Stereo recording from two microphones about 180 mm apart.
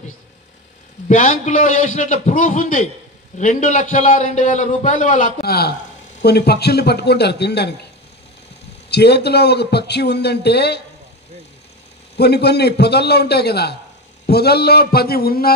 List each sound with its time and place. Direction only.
1.0 s a man's voice: 40° left (ahead or behind)
5.4 s a man's voice: 60° left (ahead or behind)
8.9 s a man's voice: 65° left (ahead or behind)
12.2 s a man's voice: 65° left (ahead or behind)